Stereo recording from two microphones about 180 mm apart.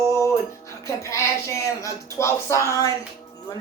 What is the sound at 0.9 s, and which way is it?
Speech, 15° left (ahead or behind).